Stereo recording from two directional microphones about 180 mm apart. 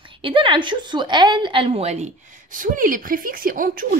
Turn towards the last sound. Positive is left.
turn(degrees=-55)  # may be behind; listen again after turning